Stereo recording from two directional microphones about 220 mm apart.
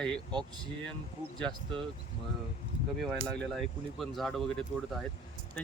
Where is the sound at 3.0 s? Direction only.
5° left (ahead or behind).